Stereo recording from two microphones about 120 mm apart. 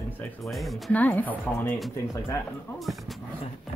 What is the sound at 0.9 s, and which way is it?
Speech, 15° left (ahead or behind).